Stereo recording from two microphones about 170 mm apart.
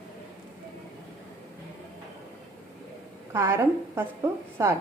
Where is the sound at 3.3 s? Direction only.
15° right (ahead or behind).